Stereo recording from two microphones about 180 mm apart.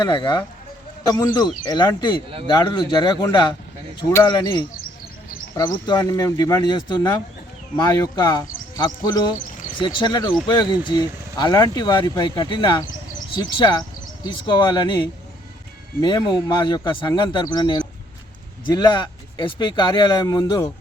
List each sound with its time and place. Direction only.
0.0 s speech: 25° left (ahead or behind)